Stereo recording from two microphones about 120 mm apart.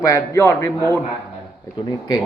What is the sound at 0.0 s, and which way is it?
Speech, 25° left (ahead or behind).